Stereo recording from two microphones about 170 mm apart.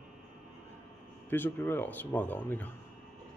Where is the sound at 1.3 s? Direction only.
10° left (ahead or behind).